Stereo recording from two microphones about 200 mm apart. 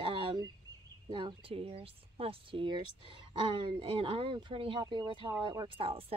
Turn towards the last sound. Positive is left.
turn(degrees=-30)  # may be behind; listen again after turning